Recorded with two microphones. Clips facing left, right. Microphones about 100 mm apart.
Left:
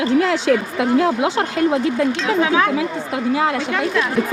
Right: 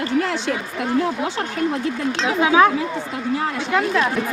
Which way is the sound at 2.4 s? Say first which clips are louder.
Right 3 dB; 20° right (ahead or behind).